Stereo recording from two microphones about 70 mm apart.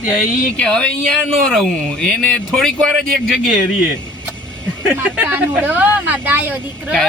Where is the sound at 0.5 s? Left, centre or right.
Centre.